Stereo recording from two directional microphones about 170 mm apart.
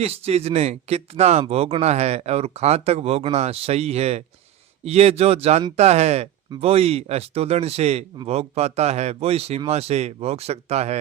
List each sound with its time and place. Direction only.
0.0 s speech: 40° right (ahead or behind)